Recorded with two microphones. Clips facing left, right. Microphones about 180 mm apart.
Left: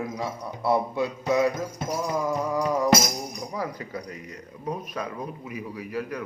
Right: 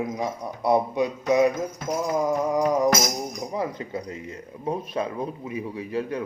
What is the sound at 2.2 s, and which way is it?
Speech, 20° right (ahead or behind).